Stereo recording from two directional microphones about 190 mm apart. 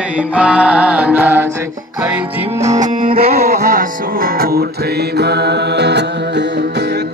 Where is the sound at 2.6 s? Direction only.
40° right (ahead or behind).